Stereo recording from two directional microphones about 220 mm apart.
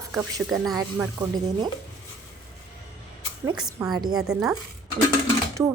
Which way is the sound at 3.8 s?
20° right (ahead or behind).